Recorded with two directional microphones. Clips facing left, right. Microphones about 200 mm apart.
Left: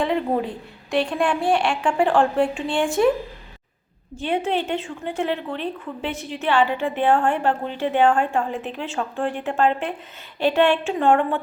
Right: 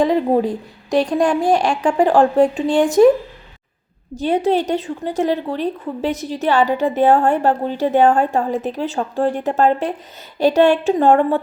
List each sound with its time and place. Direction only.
0.0 s a woman's voice: 40° right (ahead or behind)
4.2 s a woman's voice: 40° right (ahead or behind)